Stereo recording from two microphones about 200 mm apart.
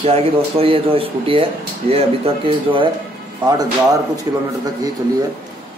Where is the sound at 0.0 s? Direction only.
30° right (ahead or behind).